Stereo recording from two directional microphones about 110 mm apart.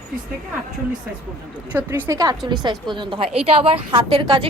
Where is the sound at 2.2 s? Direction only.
40° right (ahead or behind).